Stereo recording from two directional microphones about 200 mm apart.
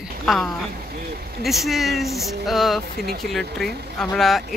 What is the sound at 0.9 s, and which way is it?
Vehicle, 50° right (ahead or behind).